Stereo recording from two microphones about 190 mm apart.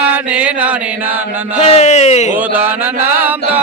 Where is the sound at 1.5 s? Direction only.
35° left (ahead or behind).